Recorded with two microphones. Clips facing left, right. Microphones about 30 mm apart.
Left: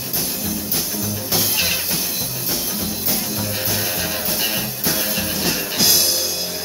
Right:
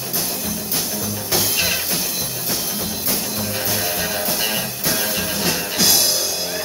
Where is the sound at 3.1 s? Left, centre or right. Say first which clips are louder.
Right 1 dB; centre.